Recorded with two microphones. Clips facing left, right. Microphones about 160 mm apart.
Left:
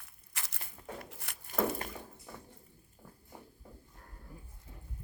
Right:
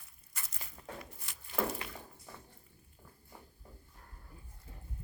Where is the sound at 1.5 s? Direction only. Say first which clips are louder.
Left 3 dB; 45° left (ahead or behind).